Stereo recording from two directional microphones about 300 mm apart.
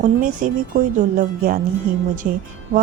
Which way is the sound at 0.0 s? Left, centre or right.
Right.